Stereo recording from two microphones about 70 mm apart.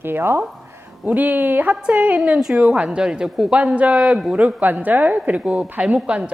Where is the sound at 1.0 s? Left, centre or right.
Right.